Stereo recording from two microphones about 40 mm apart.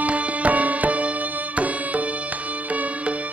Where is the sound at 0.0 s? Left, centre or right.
Right.